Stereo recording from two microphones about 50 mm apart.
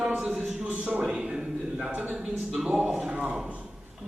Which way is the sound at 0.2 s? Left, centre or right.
Centre.